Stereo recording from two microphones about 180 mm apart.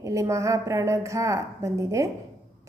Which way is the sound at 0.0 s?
15° right (ahead or behind).